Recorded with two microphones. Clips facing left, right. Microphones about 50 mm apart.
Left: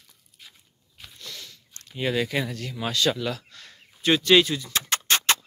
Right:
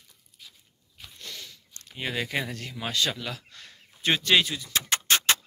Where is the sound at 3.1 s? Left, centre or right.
Centre.